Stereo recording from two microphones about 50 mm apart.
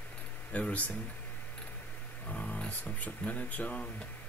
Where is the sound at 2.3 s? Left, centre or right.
Left.